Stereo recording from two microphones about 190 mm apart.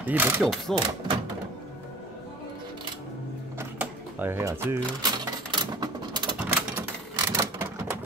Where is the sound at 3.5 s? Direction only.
10° right (ahead or behind).